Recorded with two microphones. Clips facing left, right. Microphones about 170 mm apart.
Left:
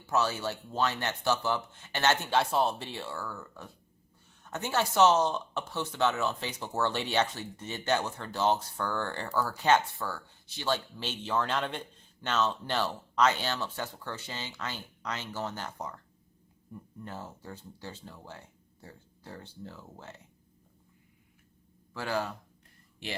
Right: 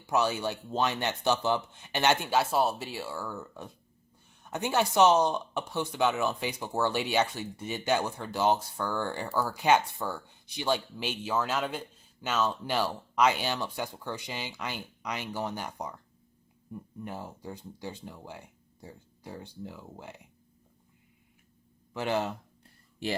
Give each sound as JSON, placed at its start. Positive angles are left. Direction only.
{"t": 0.1, "sound": "speech", "side_deg": -15}
{"t": 3.2, "sound": "speech", "side_deg": -20}
{"t": 21.9, "sound": "speech", "side_deg": -20}